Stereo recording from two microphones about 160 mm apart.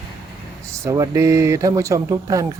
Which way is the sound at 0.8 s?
20° right (ahead or behind).